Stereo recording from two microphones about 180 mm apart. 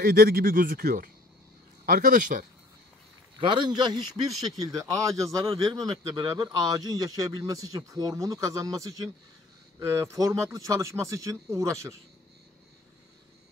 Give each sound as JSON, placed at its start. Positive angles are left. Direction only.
{"t": 0.0, "sound": "speech", "side_deg": -55}
{"t": 3.3, "sound": "a man's voice", "side_deg": -25}